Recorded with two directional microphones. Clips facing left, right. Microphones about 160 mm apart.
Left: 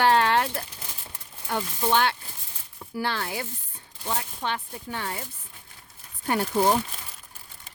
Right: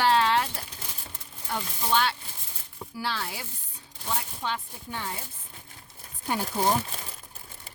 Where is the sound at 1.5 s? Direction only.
55° left (ahead or behind).